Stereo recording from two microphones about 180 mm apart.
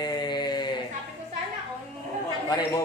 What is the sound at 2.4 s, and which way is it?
Speech, 25° left (ahead or behind).